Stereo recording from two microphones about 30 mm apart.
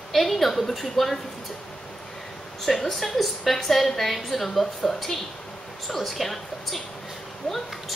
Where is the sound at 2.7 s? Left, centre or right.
Centre.